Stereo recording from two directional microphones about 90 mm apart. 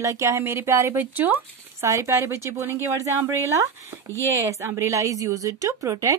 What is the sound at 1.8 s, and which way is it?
Speech, 35° right (ahead or behind).